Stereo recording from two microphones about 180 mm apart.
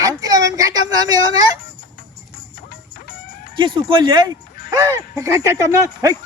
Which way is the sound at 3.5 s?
25° right (ahead or behind).